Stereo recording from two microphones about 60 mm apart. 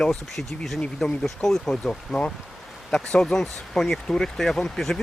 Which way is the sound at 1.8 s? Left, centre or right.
Centre.